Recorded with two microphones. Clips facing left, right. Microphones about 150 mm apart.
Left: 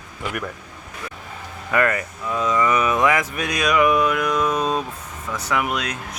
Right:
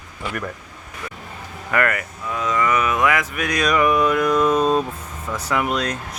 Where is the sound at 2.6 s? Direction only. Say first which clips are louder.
Even; 15° left (ahead or behind).